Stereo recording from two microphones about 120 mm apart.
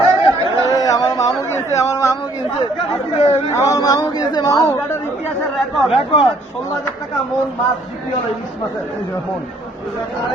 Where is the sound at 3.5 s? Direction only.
30° left (ahead or behind).